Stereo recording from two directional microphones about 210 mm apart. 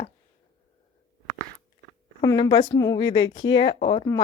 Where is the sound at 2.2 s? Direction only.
20° left (ahead or behind).